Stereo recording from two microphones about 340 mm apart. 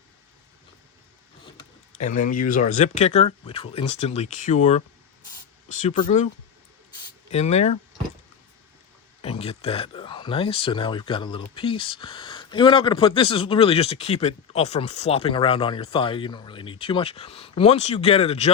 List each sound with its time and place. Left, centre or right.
1.5 s speech: left
7.3 s speech: centre
9.2 s speech: centre